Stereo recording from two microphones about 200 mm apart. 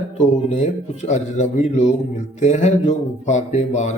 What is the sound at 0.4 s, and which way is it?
A man's voice, 35° left (ahead or behind).